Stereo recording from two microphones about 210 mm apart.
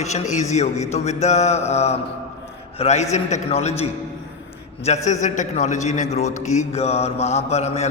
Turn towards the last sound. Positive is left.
turn(degrees=30)  # may be behind; listen again after turning